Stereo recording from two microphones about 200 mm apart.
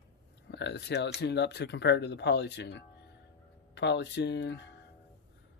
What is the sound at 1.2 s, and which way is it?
Speech, 60° left (ahead or behind).